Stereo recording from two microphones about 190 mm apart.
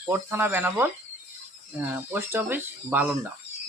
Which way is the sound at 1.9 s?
10° right (ahead or behind).